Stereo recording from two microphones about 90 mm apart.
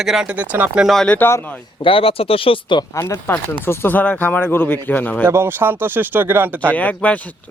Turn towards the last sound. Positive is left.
turn(degrees=15)  # may be behind; listen again after turning